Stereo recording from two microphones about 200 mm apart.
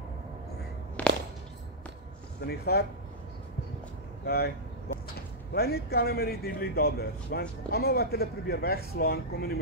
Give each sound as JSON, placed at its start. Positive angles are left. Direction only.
{"t": 1.0, "sound": "walk", "side_deg": 5}
{"t": 2.4, "sound": "speech", "side_deg": 50}
{"t": 4.3, "sound": "speech", "side_deg": 50}